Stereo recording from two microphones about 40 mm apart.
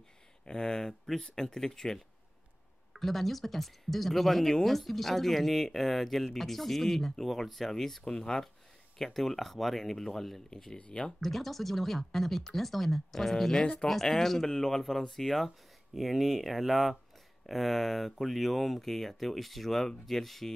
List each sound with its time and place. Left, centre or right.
0.5 s speech: centre
3.0 s speech: centre
10.5 s speech: centre
11.1 s speech: centre